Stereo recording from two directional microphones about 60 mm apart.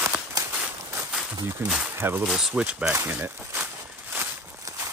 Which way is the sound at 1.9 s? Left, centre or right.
Right.